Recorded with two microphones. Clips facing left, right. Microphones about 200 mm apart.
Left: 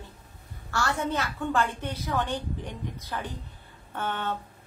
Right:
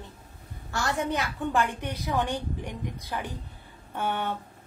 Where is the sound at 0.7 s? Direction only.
15° right (ahead or behind).